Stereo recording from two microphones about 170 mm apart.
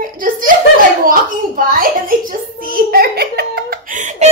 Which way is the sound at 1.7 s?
55° right (ahead or behind).